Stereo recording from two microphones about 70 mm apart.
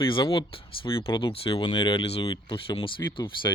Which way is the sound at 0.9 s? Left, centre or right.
Left.